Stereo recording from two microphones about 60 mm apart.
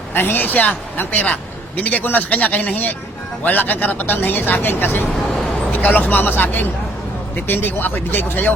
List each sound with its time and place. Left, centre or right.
0.1 s a woman's voice: left